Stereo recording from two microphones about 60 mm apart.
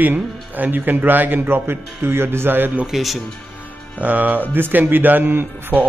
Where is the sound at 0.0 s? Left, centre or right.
Right.